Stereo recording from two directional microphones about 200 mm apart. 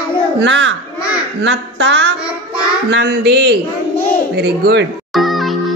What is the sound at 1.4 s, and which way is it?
Child singing, 65° right (ahead or behind).